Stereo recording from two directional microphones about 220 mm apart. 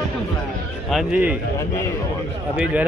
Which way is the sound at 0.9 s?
5° right (ahead or behind).